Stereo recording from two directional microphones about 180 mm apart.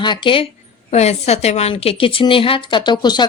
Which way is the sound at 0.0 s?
25° left (ahead or behind).